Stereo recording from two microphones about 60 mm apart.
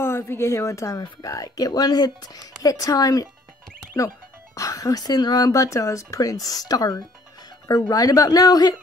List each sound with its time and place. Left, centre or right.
0.0 s speech: left
4.6 s speech: left